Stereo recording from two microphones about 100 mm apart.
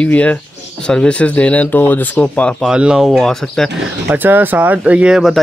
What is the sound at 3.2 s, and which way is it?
Speech, 5° left (ahead or behind).